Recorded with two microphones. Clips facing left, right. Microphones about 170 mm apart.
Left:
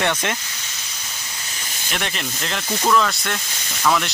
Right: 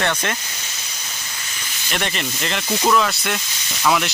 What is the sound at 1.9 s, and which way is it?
Speech, centre (ahead or behind).